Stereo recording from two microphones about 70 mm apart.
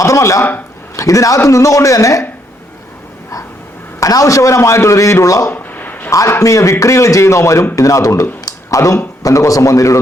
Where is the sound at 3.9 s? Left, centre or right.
Left.